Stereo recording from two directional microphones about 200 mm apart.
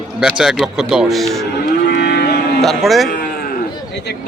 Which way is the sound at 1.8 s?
55° left (ahead or behind).